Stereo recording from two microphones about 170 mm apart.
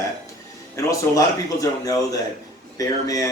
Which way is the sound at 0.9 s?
20° left (ahead or behind).